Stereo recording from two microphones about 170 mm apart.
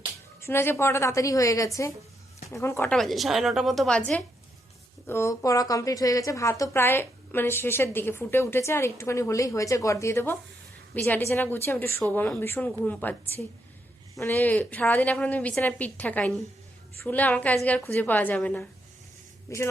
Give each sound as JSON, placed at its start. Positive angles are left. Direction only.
{"t": 0.4, "sound": "a woman's voice", "side_deg": 15}
{"t": 2.9, "sound": "a woman's voice", "side_deg": 0}